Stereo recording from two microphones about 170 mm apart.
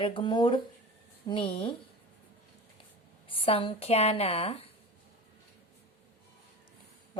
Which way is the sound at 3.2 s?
30° left (ahead or behind).